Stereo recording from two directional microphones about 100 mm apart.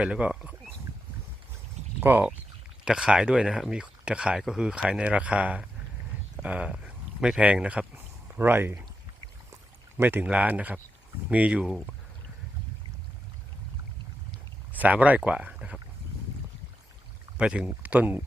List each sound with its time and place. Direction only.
0.0 s speech: 10° right (ahead or behind)
2.0 s speech: 20° right (ahead or behind)
2.8 s speech: 10° right (ahead or behind)
10.0 s speech: 20° right (ahead or behind)
14.8 s speech: 15° right (ahead or behind)
17.3 s speech: 10° right (ahead or behind)